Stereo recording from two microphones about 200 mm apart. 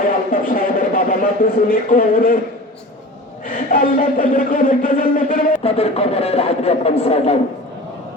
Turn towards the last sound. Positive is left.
turn(degrees=30)  # may be behind; listen again after turning